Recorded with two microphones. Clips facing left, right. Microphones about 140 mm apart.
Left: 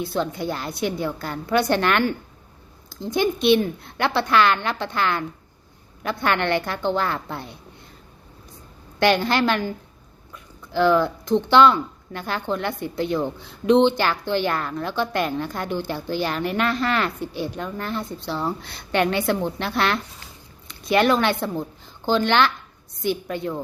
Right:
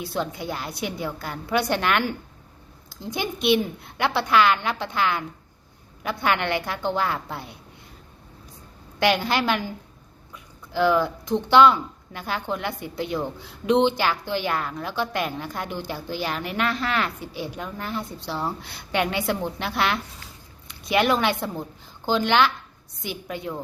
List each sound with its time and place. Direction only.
0.0 s a woman's voice: 5° right (ahead or behind)
9.0 s a woman's voice: 5° right (ahead or behind)
10.3 s a sound: 5° right (ahead or behind)
11.4 s a woman's voice: 10° right (ahead or behind)